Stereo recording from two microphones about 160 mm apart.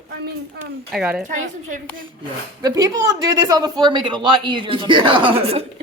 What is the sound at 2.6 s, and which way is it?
A man's voice, 25° right (ahead or behind).